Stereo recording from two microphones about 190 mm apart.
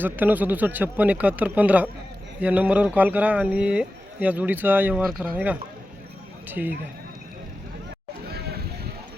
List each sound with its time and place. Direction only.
0.0 s speech: 10° right (ahead or behind)
6.5 s speech: 10° right (ahead or behind)
8.3 s a sound: 55° right (ahead or behind)